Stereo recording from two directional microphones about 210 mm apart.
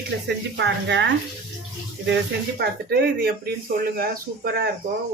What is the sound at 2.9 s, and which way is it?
Speech, 50° right (ahead or behind).